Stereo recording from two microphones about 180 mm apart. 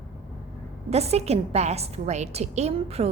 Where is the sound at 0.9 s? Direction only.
35° right (ahead or behind).